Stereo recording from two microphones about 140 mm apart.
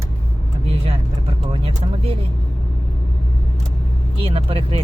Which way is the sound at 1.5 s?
40° right (ahead or behind).